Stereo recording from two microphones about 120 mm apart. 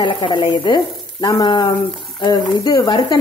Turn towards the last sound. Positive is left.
turn(degrees=35)  # may be behind; listen again after turning